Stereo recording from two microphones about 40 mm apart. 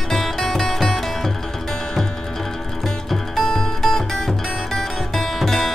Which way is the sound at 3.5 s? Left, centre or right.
Centre.